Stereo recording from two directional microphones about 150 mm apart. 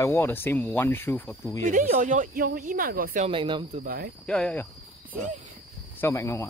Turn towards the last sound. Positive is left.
turn(degrees=20)  # may be behind; listen again after turning